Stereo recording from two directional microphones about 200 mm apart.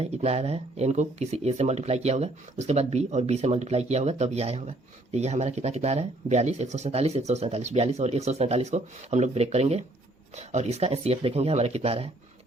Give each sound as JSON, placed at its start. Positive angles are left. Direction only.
{"t": 0.0, "sound": "speech", "side_deg": -30}